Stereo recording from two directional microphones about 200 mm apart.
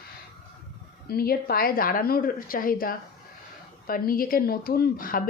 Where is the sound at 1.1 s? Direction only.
50° left (ahead or behind).